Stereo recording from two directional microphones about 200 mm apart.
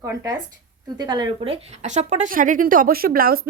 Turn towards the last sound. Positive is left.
turn(degrees=-45)  # may be behind; listen again after turning